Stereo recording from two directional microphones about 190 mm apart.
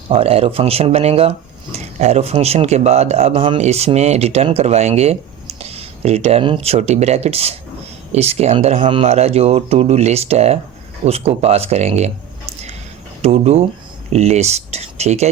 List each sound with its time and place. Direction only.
0.1 s speech: 30° right (ahead or behind)
13.2 s speech: 35° right (ahead or behind)